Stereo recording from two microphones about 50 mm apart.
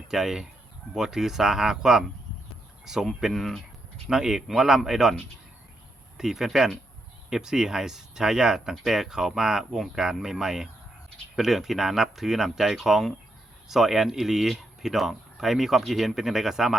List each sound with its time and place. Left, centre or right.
0.1 s speech: centre
4.1 s speech: centre
6.1 s speech: centre